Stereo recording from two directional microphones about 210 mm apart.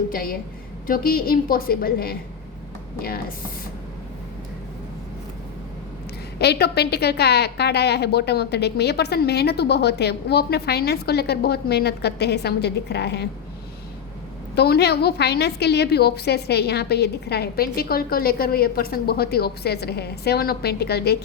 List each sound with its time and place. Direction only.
0.1 s a woman's voice: 45° left (ahead or behind)
6.4 s a woman's voice: 50° left (ahead or behind)
14.5 s a woman's voice: 50° left (ahead or behind)